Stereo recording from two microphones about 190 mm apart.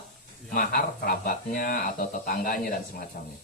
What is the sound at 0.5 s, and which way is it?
Speech, 50° left (ahead or behind).